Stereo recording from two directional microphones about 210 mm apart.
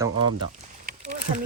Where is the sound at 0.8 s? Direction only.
40° right (ahead or behind).